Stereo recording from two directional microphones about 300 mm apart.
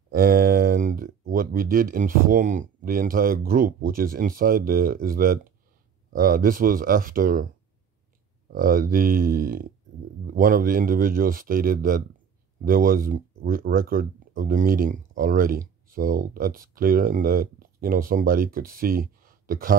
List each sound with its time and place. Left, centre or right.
0.1 s a sound: right
1.3 s speech: right
8.5 s speech: right